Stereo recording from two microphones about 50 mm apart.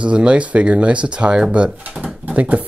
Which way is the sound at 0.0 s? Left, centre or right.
Right.